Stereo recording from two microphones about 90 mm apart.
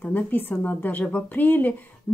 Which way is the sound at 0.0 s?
20° left (ahead or behind).